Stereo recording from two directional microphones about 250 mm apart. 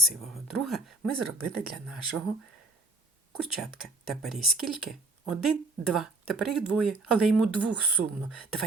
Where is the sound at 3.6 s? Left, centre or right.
Centre.